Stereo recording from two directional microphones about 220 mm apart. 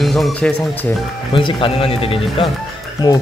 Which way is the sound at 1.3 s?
25° left (ahead or behind).